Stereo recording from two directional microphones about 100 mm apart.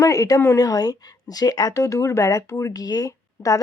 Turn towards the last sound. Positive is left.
turn(degrees=35)  # may be behind; listen again after turning